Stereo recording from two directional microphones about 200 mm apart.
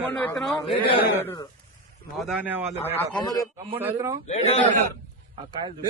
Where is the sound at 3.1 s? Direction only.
20° left (ahead or behind).